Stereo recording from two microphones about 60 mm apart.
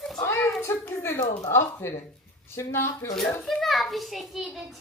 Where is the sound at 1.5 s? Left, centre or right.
Left.